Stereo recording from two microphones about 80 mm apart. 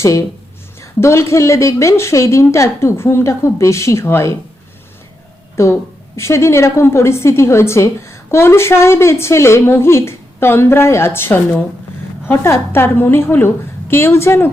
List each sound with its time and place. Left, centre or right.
0.0 s a woman's voice: left
5.6 s a woman's voice: left